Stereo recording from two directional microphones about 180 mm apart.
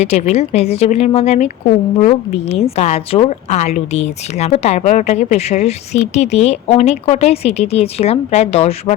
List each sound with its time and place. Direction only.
0.0 s a woman's voice: 35° left (ahead or behind)